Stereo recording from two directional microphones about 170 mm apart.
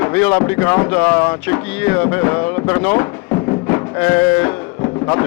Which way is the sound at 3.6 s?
15° left (ahead or behind).